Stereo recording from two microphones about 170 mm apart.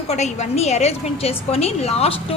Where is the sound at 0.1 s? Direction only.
40° left (ahead or behind).